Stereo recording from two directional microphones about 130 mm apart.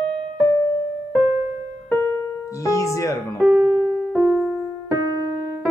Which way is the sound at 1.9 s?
20° left (ahead or behind).